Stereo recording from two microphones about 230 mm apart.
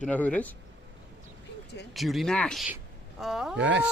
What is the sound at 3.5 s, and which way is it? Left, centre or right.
Speech, right.